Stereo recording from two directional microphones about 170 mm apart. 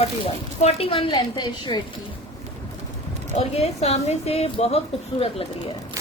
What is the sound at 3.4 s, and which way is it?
A woman's voice, 40° left (ahead or behind).